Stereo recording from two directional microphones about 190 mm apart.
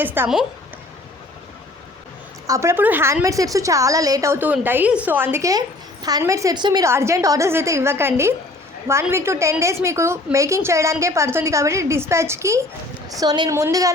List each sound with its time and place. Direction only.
0.0 s a woman's voice: 10° right (ahead or behind)
2.5 s a woman's voice: 15° right (ahead or behind)